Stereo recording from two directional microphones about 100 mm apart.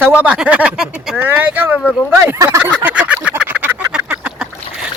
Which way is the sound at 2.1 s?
30° right (ahead or behind).